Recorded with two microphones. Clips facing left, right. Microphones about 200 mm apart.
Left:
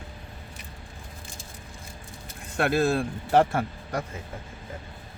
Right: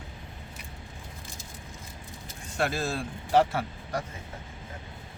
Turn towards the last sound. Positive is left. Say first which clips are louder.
# left 3 dB
turn(degrees=55)  # may be behind; listen again after turning